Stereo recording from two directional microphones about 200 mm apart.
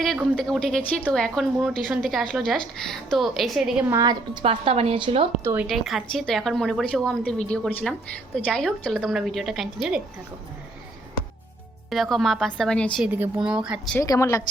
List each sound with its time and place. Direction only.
0.0 s a woman's voice: centre (ahead or behind)
3.9 s a woman's voice: 20° right (ahead or behind)
5.4 s speech: 10° right (ahead or behind)
5.6 s a woman's voice: centre (ahead or behind)
11.9 s a woman's voice: centre (ahead or behind)
13.1 s a woman's voice: 10° right (ahead or behind)
14.0 s a woman's voice: 15° left (ahead or behind)